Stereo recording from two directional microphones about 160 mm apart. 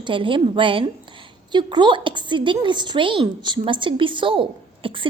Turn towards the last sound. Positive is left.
turn(degrees=-30)  # may be behind; listen again after turning